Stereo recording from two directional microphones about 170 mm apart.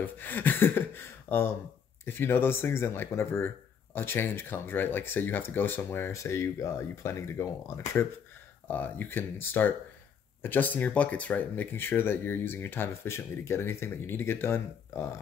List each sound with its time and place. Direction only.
0.0 s speech: 10° left (ahead or behind)